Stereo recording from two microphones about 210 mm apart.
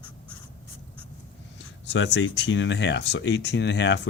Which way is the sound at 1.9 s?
60° left (ahead or behind).